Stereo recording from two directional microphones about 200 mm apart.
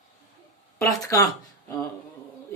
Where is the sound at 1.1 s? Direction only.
15° left (ahead or behind).